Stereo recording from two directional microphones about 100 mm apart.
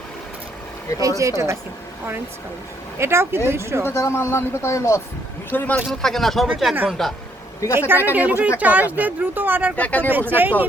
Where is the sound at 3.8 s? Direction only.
25° left (ahead or behind).